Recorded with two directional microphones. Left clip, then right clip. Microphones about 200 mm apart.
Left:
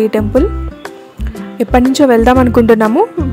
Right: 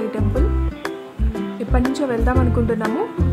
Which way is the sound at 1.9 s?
50° left (ahead or behind).